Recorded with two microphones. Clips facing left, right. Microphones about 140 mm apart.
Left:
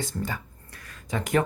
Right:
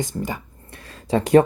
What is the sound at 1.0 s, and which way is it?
Speech, 30° right (ahead or behind).